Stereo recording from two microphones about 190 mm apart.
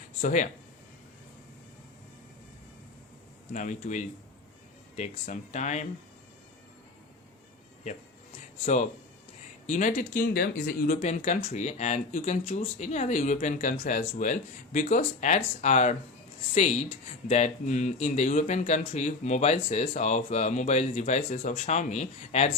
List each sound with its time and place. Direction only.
0.2 s speech: 40° left (ahead or behind)
3.5 s speech: 40° left (ahead or behind)
8.6 s speech: 40° left (ahead or behind)